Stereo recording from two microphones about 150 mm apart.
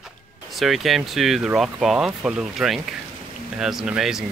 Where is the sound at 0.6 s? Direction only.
Centre (ahead or behind).